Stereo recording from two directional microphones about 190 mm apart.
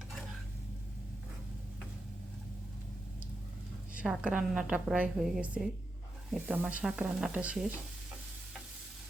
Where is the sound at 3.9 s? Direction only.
5° right (ahead or behind).